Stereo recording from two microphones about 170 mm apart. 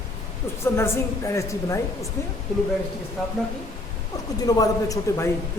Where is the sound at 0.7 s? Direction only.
15° left (ahead or behind).